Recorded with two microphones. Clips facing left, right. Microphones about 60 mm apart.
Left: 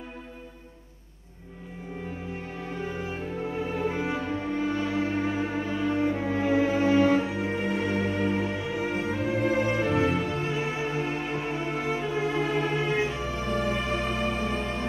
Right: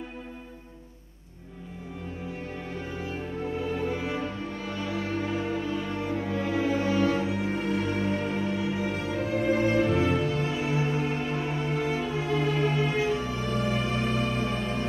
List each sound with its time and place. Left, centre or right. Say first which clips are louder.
3.5 s music: left 1 dB; left